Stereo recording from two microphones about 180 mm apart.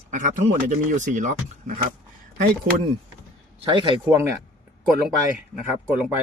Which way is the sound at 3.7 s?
25° right (ahead or behind).